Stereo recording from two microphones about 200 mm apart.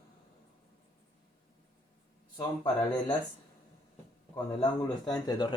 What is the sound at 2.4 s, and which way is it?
Speech, 20° left (ahead or behind).